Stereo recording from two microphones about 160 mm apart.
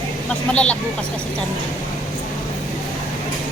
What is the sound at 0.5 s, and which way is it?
Speech, 5° left (ahead or behind).